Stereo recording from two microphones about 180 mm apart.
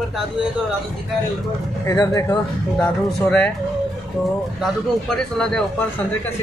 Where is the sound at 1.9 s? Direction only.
20° left (ahead or behind).